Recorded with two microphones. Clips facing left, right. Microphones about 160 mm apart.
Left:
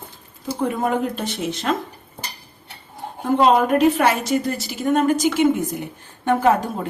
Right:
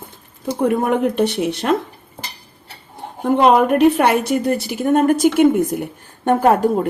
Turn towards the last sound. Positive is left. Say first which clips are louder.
# right 3 dB
turn(degrees=-60)  # may be behind; listen again after turning